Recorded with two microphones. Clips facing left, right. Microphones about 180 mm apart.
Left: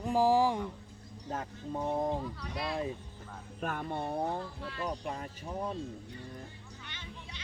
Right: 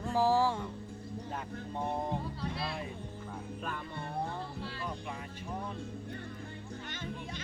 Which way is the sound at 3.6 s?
55° left (ahead or behind).